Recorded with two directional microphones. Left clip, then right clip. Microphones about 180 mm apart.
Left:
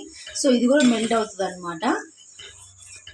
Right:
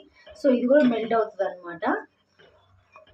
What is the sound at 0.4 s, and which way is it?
Speech, 20° left (ahead or behind).